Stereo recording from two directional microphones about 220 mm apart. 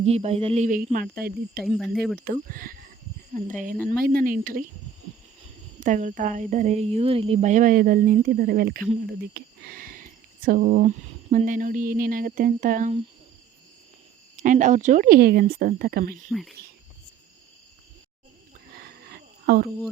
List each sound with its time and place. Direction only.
0.0 s speech: 30° right (ahead or behind)
1.6 s speech: centre (ahead or behind)
2.2 s speech: 40° right (ahead or behind)
5.8 s speech: 35° right (ahead or behind)
14.3 s speech: 35° right (ahead or behind)
16.3 s speech: centre (ahead or behind)
18.8 s a sound: 45° right (ahead or behind)